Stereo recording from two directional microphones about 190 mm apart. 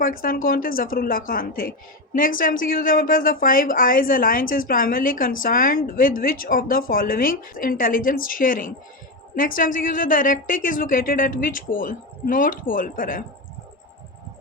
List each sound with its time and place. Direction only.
0.0 s a woman's voice: 50° left (ahead or behind)